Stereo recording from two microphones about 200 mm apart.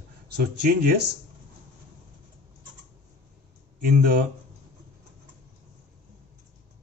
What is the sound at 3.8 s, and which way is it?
Speech, 55° right (ahead or behind).